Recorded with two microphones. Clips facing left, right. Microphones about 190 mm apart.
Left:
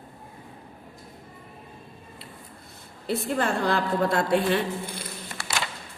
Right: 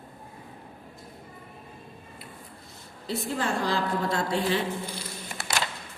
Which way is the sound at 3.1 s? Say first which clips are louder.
Left 3 dB; 55° left (ahead or behind).